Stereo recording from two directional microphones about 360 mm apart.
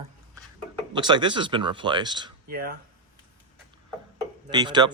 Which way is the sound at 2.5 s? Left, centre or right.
Right.